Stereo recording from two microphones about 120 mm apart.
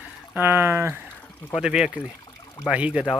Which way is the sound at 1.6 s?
5° right (ahead or behind).